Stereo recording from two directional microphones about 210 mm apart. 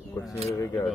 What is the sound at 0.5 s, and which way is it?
Speech, 15° left (ahead or behind).